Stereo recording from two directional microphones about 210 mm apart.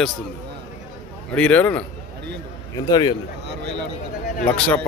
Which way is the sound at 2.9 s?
20° left (ahead or behind).